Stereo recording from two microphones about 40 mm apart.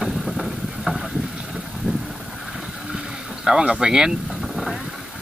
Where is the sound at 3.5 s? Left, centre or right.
Centre.